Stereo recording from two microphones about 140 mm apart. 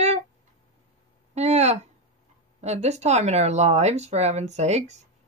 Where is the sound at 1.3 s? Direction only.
50° right (ahead or behind).